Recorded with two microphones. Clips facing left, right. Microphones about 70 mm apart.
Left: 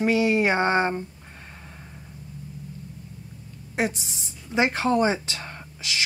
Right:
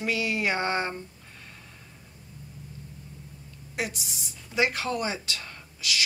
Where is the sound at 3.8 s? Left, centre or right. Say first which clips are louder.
Left 6 dB; left.